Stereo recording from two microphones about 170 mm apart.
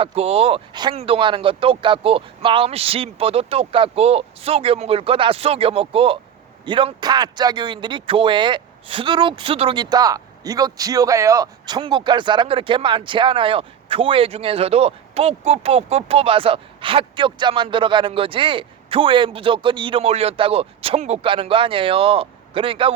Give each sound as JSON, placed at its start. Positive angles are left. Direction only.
{"t": 0.0, "sound": "speech", "side_deg": -35}